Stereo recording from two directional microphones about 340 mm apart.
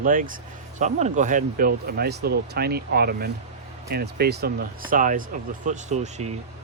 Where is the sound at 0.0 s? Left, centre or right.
Right.